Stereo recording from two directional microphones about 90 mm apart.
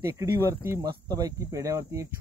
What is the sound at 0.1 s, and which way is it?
Speech, 35° right (ahead or behind).